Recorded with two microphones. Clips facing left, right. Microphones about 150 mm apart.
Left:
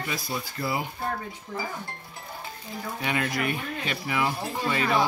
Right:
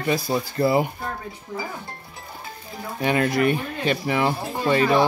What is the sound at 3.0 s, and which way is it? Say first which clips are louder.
Speech: right 8 dB; 35° right (ahead or behind).